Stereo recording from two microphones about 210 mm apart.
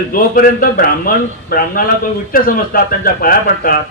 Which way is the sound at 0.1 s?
40° left (ahead or behind).